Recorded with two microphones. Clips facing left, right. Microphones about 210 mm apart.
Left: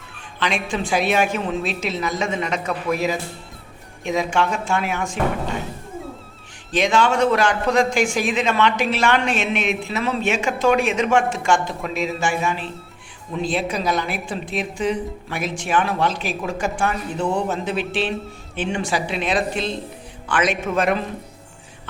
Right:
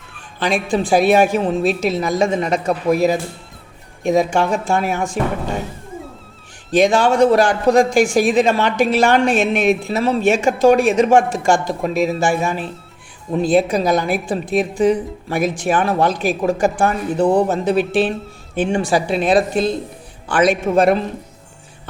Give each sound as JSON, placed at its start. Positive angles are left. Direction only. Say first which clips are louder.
{"t": 0.3, "sound": "a woman's voice", "louder": "right 6 dB", "side_deg": -40}
{"t": 6.7, "sound": "a woman's voice", "louder": "right 5 dB", "side_deg": -35}